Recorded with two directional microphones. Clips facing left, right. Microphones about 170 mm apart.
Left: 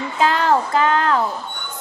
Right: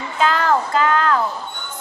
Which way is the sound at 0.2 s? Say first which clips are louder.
Left 1 dB; 20° left (ahead or behind).